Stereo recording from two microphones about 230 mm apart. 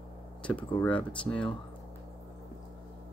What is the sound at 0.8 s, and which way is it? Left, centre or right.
Speech, centre.